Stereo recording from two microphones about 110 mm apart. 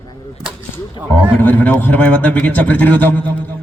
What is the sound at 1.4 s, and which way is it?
A man's voice, 15° left (ahead or behind).